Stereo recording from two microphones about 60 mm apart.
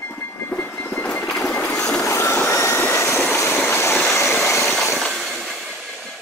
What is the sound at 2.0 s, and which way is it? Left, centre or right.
Vehicle, left.